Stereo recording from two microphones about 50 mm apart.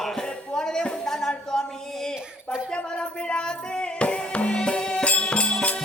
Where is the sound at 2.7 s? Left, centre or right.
Left.